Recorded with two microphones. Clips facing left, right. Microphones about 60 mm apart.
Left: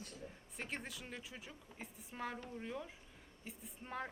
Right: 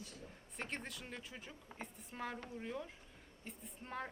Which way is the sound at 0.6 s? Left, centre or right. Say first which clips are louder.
Even; centre.